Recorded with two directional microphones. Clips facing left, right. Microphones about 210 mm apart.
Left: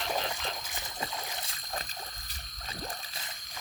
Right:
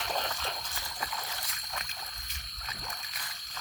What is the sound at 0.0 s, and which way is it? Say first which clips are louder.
Frog: left 2 dB; 10° left (ahead or behind).